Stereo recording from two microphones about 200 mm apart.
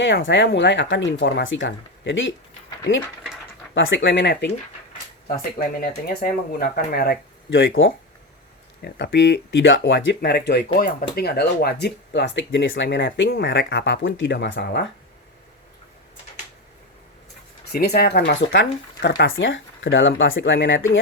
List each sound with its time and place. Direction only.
0.0 s speech: 65° left (ahead or behind)
3.8 s speech: 65° left (ahead or behind)
5.4 s speech: 45° left (ahead or behind)
17.7 s speech: 50° left (ahead or behind); by 21.0 s 70° left (ahead or behind)